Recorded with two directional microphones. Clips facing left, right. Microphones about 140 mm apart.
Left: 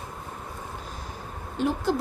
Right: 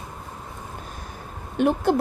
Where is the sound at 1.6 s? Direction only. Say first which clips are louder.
Right 5 dB; 60° right (ahead or behind).